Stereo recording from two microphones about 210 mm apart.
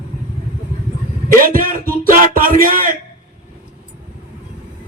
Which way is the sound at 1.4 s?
40° right (ahead or behind).